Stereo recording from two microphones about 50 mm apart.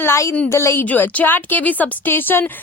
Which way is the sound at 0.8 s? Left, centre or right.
Left.